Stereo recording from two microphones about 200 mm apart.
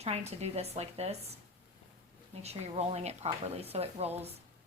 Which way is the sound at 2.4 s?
30° right (ahead or behind).